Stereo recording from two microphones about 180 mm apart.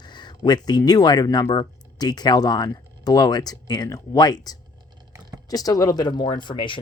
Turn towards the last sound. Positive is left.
turn(degrees=25)  # may be behind; listen again after turning